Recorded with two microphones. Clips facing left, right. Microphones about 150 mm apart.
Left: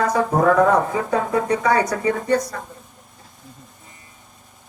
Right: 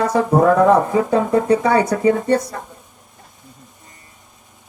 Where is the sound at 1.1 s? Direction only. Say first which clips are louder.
Right 4 dB; 30° right (ahead or behind).